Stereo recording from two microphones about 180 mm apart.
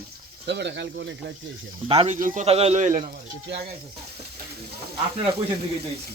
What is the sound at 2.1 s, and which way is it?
Speech, 45° right (ahead or behind).